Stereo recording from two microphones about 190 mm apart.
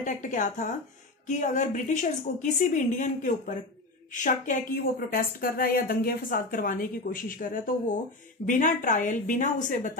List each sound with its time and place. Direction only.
0.0 s a woman's voice: 40° left (ahead or behind)